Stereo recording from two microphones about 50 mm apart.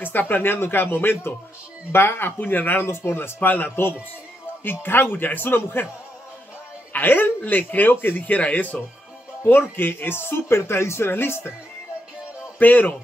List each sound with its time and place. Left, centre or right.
0.0 s speech: left
3.3 s speech: left
6.9 s speech: left
8.2 s speech: left
12.5 s speech: left